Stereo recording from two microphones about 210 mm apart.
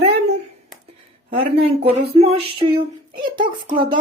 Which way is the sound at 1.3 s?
25° right (ahead or behind).